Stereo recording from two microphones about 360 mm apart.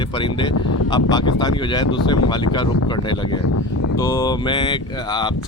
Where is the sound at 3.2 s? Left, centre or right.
Left.